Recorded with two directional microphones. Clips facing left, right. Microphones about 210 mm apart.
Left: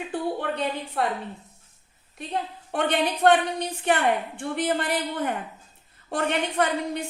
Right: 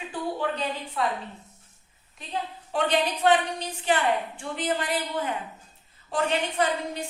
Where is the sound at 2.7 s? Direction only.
60° left (ahead or behind).